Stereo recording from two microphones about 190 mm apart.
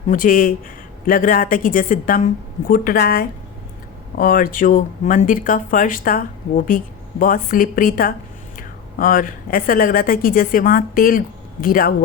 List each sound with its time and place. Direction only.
0.1 s speech: 45° left (ahead or behind)